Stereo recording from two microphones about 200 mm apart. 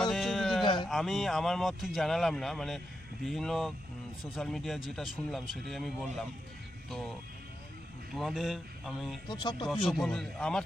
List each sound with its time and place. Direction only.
0.0 s a sound: centre (ahead or behind)
0.6 s a sound: 25° left (ahead or behind)
0.9 s speech: centre (ahead or behind)
8.1 s speech: centre (ahead or behind)
9.2 s speech: 20° left (ahead or behind)
9.6 s speech: centre (ahead or behind)